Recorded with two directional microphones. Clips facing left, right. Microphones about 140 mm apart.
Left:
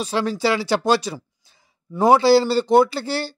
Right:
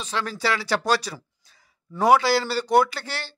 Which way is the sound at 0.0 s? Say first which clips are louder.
Left 6 dB; 35° left (ahead or behind).